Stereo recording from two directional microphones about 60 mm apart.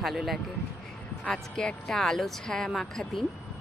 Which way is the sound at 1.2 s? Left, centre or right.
Centre.